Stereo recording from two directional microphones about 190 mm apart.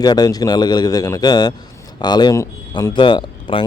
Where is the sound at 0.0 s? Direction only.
20° left (ahead or behind).